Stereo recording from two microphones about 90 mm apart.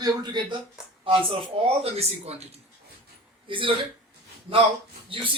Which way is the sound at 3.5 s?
70° right (ahead or behind).